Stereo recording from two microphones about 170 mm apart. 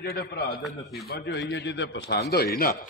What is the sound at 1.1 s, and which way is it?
A man's voice, 75° left (ahead or behind).